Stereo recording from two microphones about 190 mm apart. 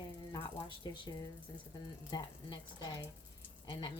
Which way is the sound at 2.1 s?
20° left (ahead or behind).